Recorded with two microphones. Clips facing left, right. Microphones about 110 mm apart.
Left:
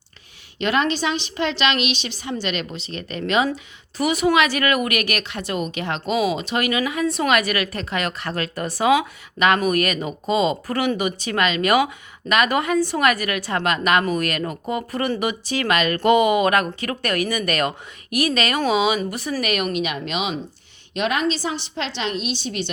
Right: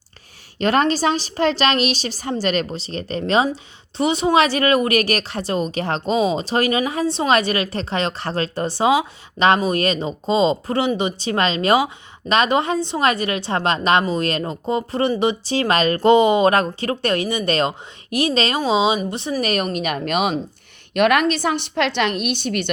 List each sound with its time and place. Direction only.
0.6 s speech: 40° right (ahead or behind)
20.9 s a woman's voice: 60° right (ahead or behind)